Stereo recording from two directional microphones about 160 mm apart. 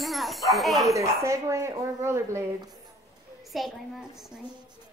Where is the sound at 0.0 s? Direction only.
Centre (ahead or behind).